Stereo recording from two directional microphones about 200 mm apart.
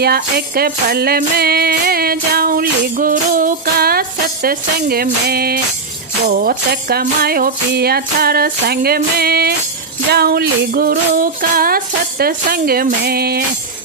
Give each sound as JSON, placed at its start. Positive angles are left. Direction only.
{"t": 0.0, "sound": "music", "side_deg": -50}